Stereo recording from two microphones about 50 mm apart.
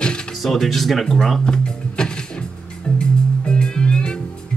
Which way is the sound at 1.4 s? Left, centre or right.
Centre.